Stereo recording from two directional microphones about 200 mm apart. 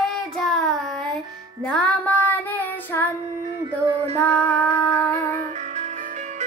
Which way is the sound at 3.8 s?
25° right (ahead or behind).